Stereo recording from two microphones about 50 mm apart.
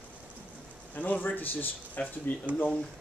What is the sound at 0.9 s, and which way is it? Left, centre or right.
Speech, left.